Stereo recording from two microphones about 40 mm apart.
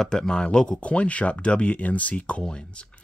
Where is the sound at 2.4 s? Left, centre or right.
Left.